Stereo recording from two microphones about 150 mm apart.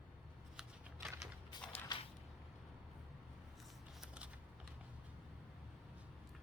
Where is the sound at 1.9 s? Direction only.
30° left (ahead or behind).